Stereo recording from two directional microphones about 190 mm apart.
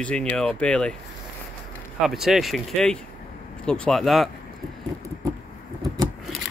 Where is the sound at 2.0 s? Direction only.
Centre (ahead or behind).